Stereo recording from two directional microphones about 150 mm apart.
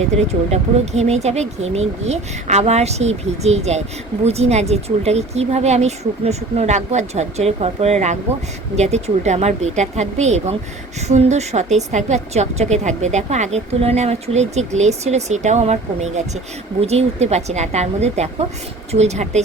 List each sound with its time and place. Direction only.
0.5 s speech: 45° right (ahead or behind)